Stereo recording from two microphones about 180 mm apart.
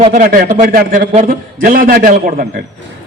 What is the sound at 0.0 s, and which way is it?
A man's voice, 45° right (ahead or behind).